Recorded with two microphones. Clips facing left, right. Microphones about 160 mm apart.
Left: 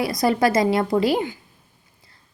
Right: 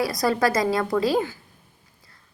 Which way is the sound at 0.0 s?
25° left (ahead or behind).